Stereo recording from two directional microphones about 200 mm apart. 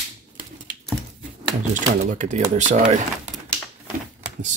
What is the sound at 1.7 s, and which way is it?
Speech, 40° right (ahead or behind).